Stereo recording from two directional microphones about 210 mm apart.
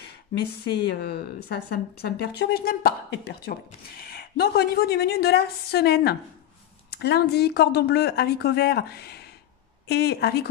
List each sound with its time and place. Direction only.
0.9 s speech: 50° left (ahead or behind)